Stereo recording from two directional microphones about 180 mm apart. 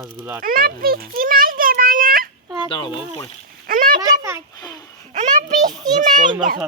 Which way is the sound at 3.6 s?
50° right (ahead or behind).